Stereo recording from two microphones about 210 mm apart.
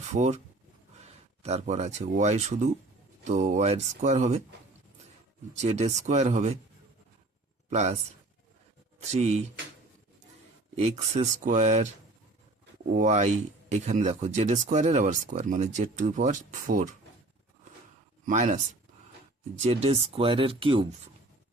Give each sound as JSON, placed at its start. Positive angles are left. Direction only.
{"t": 0.1, "sound": "speech", "side_deg": -35}
{"t": 5.5, "sound": "speech", "side_deg": -30}
{"t": 7.7, "sound": "speech", "side_deg": -30}
{"t": 9.0, "sound": "speech", "side_deg": -30}
{"t": 10.8, "sound": "speech", "side_deg": -30}
{"t": 18.3, "sound": "speech", "side_deg": -35}